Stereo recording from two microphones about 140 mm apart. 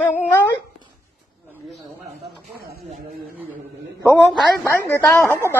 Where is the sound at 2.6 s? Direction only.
90° right.